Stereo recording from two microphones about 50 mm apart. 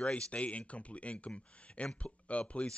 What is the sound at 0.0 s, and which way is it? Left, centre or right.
Speech, left.